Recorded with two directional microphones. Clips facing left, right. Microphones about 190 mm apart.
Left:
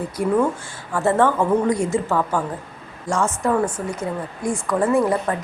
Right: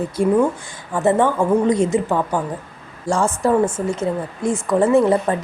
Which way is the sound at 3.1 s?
30° right (ahead or behind).